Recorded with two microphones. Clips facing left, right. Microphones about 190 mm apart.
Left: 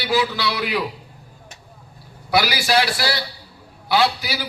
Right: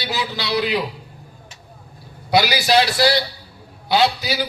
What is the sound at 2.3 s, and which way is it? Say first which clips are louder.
A man's voice: right 3 dB; 20° right (ahead or behind).